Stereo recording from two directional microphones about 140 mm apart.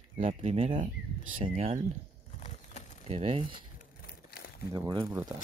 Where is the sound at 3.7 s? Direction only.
90° left.